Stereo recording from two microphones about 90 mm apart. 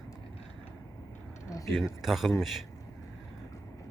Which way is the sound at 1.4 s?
40° left (ahead or behind).